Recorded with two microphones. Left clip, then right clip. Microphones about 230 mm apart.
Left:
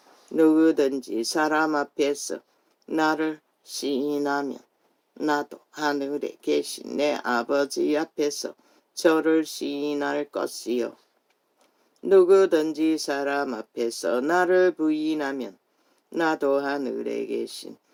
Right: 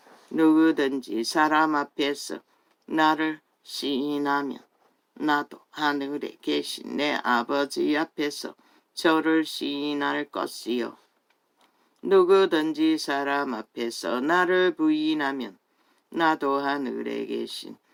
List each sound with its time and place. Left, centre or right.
0.3 s speech: right
12.0 s speech: right